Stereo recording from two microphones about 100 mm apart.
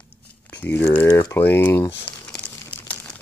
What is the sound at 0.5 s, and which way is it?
Speech, 20° left (ahead or behind).